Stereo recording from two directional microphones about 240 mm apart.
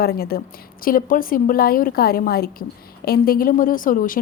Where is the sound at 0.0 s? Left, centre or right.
Left.